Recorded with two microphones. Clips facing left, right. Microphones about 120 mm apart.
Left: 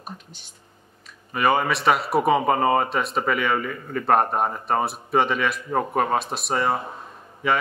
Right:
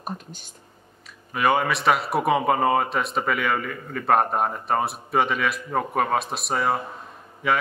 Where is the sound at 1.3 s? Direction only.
Centre (ahead or behind).